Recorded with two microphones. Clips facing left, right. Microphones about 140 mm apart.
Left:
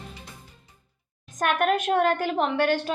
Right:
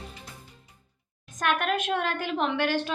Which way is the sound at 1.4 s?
45° left (ahead or behind).